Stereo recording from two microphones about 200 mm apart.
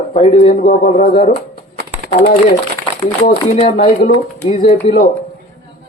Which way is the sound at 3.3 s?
30° left (ahead or behind).